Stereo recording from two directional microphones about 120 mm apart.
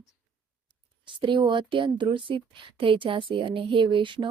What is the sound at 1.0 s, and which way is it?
Speech, 40° right (ahead or behind).